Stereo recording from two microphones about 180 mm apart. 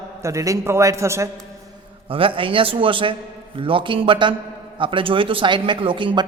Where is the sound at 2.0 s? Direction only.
30° right (ahead or behind).